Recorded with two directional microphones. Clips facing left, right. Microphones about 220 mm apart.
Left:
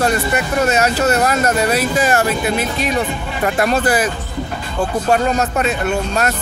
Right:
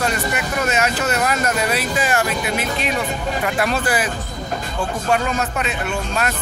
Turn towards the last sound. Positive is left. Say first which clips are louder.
# left 5 dB
turn(degrees=40)  # may be behind; listen again after turning